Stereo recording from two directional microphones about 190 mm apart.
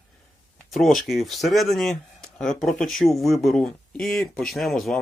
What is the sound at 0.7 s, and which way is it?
Speech, centre (ahead or behind).